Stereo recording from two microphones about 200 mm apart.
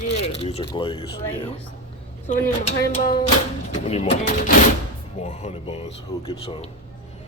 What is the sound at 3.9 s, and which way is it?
Speech, 30° left (ahead or behind).